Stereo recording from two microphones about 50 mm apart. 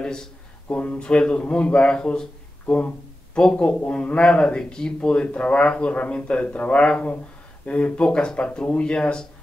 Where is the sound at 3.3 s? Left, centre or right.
Left.